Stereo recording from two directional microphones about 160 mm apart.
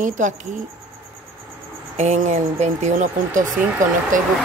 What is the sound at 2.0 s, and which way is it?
Speech, 45° right (ahead or behind).